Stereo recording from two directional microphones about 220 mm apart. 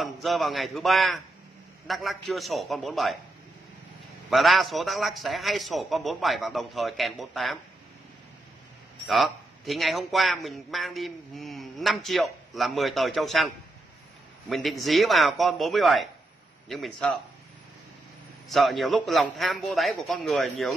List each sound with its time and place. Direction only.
0.0 s a man's voice: centre (ahead or behind)
4.3 s a man's voice: centre (ahead or behind)
9.0 s a man's voice: centre (ahead or behind)
14.5 s a man's voice: centre (ahead or behind)
18.5 s a man's voice: centre (ahead or behind)